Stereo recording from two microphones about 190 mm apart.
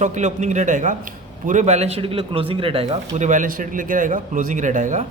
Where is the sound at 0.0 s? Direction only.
40° right (ahead or behind).